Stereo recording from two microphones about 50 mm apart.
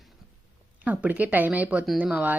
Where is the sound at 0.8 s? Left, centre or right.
Right.